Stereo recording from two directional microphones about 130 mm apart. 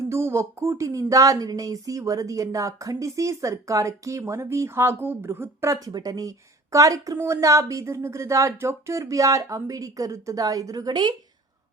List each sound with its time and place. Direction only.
0.1 s speech: 20° right (ahead or behind)